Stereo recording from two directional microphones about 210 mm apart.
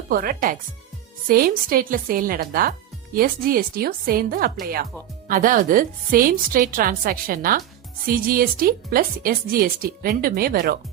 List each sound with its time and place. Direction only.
0.1 s a woman's voice: 40° right (ahead or behind)